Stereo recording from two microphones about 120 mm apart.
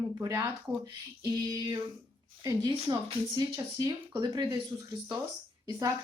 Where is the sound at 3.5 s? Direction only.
30° right (ahead or behind).